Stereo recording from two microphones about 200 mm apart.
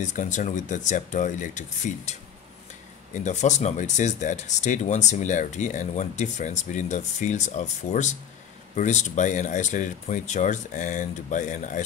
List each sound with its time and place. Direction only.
0.0 s speech: 40° left (ahead or behind)